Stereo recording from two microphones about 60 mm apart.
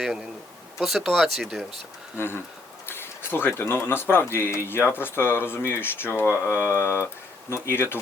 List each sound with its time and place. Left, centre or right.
0.8 s speech: centre
2.1 s speech: left